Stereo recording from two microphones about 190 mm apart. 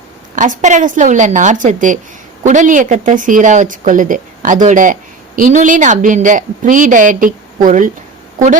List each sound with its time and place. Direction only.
0.3 s a woman's voice: 40° right (ahead or behind)